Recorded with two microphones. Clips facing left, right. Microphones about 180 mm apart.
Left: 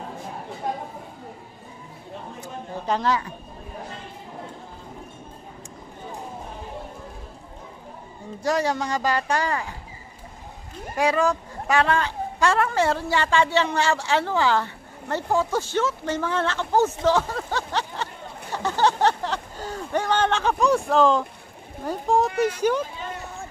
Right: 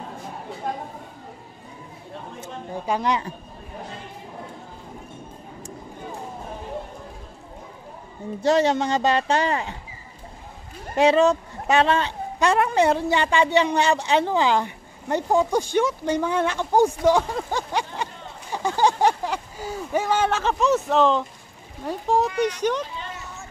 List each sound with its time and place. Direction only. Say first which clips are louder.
2.4 s speech: right 1 dB; 15° right (ahead or behind)
8.4 s speech: right 4 dB; 25° right (ahead or behind)
11.0 s a woman's voice: right 5 dB; 25° right (ahead or behind); by 23.0 s 5° left (ahead or behind)